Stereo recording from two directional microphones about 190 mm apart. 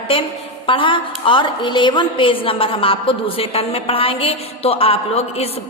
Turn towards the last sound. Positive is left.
turn(degrees=35)  # may be behind; listen again after turning